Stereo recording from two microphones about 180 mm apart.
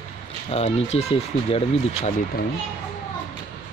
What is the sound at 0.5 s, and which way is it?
Speech, 35° left (ahead or behind).